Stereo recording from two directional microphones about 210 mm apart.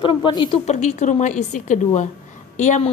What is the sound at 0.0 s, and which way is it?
Speech, 20° left (ahead or behind).